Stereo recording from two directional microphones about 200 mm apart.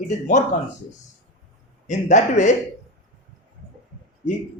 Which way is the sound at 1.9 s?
35° left (ahead or behind).